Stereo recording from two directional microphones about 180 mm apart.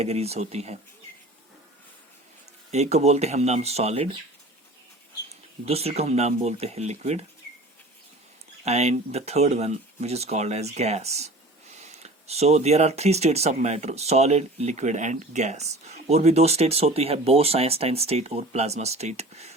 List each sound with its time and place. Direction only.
0.0 s speech: 35° right (ahead or behind)
2.7 s speech: 35° right (ahead or behind)
5.6 s speech: 35° right (ahead or behind)
8.6 s speech: 35° right (ahead or behind)